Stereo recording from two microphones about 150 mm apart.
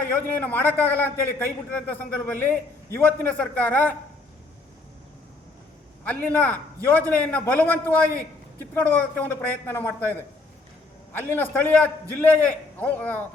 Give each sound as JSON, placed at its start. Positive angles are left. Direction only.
{"t": 0.1, "sound": "a man's voice", "side_deg": 10}
{"t": 6.1, "sound": "a man's voice", "side_deg": 10}